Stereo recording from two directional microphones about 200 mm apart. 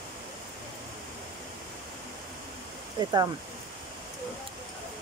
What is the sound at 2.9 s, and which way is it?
Speech, 20° right (ahead or behind).